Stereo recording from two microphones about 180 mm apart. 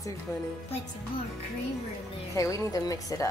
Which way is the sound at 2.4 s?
20° left (ahead or behind).